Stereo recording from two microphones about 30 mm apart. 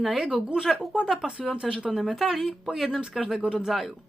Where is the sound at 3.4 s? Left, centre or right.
Right.